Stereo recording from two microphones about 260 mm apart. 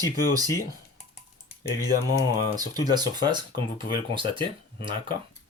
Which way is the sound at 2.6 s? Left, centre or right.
Centre.